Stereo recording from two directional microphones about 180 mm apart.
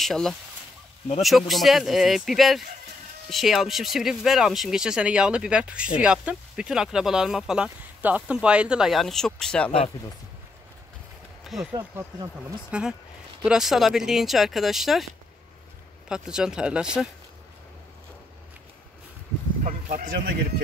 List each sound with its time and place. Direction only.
0.0 s speech: centre (ahead or behind)
11.4 s speech: centre (ahead or behind)
11.7 s speech: 20° right (ahead or behind)
13.4 s speech: 5° right (ahead or behind)
16.1 s speech: 5° right (ahead or behind)
19.6 s speech: 50° right (ahead or behind)